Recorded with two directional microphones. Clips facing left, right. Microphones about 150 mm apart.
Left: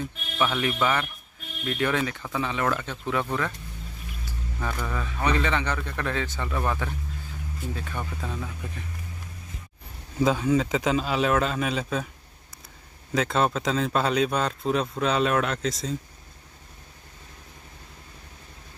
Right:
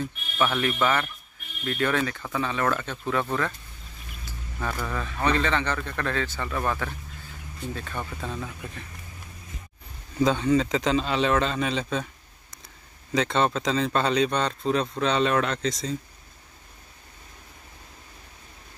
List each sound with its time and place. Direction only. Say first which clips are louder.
0.4 s a man's voice: right 1 dB; 15° left (ahead or behind)
4.6 s speech: right 1 dB; centre (ahead or behind)
5.0 s a man's voice: right 1 dB; 15° left (ahead or behind)
10.1 s speech: right 1 dB; 5° left (ahead or behind)
13.1 s speech: even; 5° left (ahead or behind)